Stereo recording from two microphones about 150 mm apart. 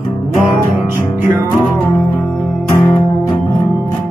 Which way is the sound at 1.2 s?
15° right (ahead or behind).